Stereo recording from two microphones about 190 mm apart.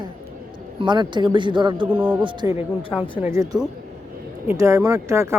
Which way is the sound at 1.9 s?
10° right (ahead or behind).